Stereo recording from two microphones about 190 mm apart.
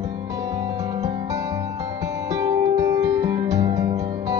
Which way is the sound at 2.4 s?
20° right (ahead or behind).